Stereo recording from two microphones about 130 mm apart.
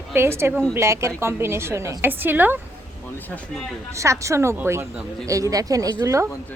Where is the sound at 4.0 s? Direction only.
25° right (ahead or behind).